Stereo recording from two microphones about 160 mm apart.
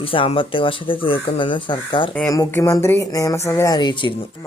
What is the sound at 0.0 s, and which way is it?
Speech, 35° left (ahead or behind).